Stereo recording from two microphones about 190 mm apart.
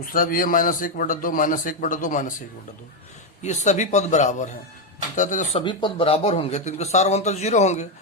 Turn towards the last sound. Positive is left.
turn(degrees=35)  # may be behind; listen again after turning